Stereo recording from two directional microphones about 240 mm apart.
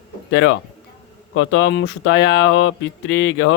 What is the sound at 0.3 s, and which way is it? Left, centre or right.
Speech, left.